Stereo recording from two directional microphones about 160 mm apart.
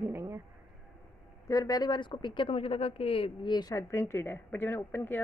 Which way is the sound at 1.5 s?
25° left (ahead or behind).